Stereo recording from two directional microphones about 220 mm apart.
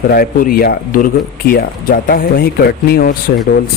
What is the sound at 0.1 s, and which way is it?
Speech, 40° left (ahead or behind).